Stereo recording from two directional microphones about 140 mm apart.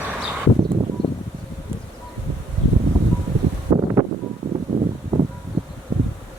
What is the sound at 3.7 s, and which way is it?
Wind noise, 25° right (ahead or behind).